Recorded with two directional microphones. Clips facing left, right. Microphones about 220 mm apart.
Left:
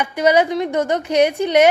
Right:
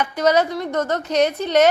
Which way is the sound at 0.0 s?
10° left (ahead or behind).